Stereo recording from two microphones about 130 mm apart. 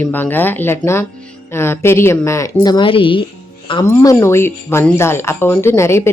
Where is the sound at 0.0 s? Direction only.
15° left (ahead or behind); by 3.2 s 40° left (ahead or behind).